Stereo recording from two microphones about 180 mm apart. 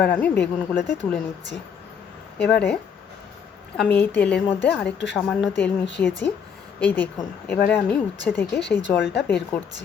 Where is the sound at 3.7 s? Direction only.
10° left (ahead or behind).